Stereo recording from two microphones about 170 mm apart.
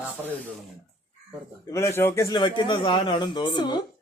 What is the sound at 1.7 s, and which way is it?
A man's voice, 15° left (ahead or behind).